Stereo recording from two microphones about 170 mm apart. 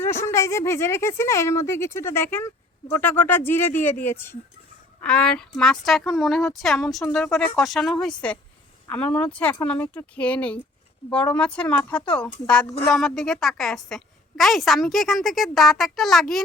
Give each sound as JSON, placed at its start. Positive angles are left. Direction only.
{"t": 0.0, "sound": "a woman's voice", "side_deg": 15}